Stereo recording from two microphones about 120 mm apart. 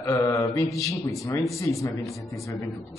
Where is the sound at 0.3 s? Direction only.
25° left (ahead or behind).